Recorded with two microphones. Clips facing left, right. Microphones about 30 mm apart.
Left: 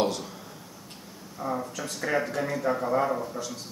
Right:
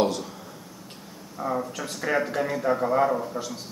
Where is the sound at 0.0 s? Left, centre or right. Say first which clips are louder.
Right 3 dB; centre.